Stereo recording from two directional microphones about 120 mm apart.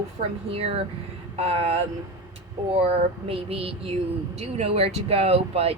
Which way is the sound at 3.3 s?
55° right (ahead or behind).